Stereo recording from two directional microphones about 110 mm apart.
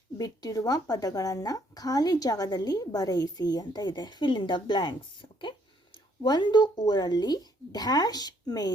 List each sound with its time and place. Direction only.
0.2 s a woman's voice: 35° left (ahead or behind)